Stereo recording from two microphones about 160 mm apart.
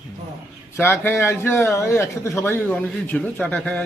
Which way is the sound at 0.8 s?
15° left (ahead or behind).